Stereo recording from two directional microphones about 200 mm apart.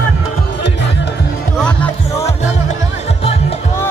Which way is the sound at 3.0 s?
30° left (ahead or behind).